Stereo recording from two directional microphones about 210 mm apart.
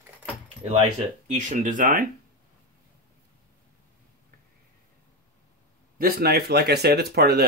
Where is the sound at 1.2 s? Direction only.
35° right (ahead or behind).